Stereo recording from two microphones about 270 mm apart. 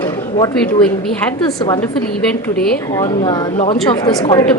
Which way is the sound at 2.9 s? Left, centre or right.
Centre.